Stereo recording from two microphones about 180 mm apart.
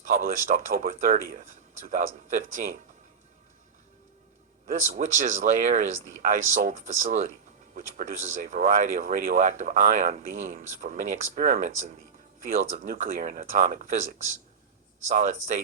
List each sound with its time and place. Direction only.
0.0 s speech: 45° right (ahead or behind)
4.6 s speech: 45° right (ahead or behind)
15.0 s speech: 40° right (ahead or behind)